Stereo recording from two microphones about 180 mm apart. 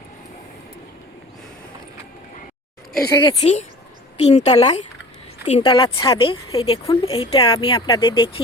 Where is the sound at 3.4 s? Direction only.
35° left (ahead or behind).